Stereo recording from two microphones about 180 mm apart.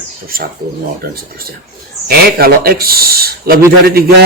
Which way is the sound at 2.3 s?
60° right (ahead or behind).